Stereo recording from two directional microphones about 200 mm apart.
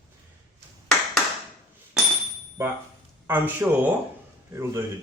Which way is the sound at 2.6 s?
10° right (ahead or behind).